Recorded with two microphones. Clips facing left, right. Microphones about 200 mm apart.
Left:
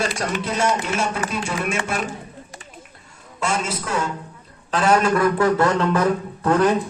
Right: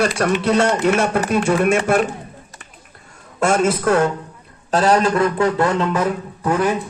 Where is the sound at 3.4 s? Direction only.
55° right (ahead or behind).